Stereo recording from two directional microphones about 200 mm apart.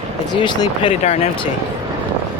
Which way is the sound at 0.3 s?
25° left (ahead or behind).